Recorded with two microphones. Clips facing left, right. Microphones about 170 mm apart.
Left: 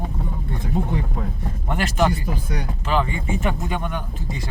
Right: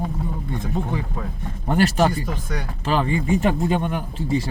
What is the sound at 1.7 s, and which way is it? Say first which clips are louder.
Speech: right 3 dB; 35° right (ahead or behind).